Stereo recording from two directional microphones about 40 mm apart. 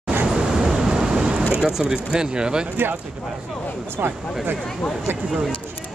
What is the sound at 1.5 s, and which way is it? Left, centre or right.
Speech, centre.